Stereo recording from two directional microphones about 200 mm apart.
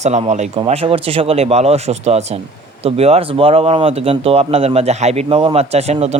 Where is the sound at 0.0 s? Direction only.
35° right (ahead or behind).